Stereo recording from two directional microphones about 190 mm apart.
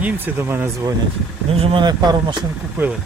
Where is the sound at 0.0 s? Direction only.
10° right (ahead or behind).